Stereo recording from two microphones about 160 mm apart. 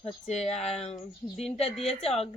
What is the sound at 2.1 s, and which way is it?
Speech, 40° left (ahead or behind).